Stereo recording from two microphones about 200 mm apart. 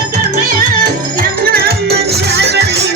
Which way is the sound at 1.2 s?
50° right (ahead or behind).